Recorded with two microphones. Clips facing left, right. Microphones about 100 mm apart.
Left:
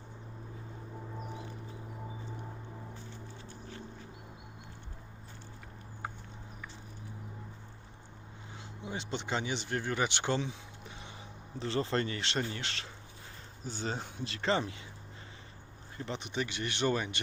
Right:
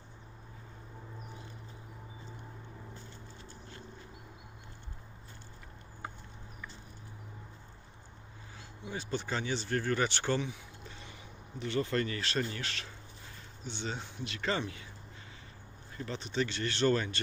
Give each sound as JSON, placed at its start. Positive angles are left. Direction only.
{"t": 8.8, "sound": "speech", "side_deg": 25}
{"t": 11.5, "sound": "speech", "side_deg": 30}
{"t": 13.7, "sound": "speech", "side_deg": 40}
{"t": 16.0, "sound": "speech", "side_deg": 20}